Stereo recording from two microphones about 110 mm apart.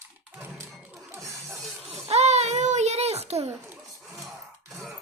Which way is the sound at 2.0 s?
80° right.